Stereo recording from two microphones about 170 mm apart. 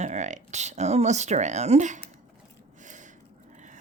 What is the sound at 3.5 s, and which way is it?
Dog, 45° right (ahead or behind).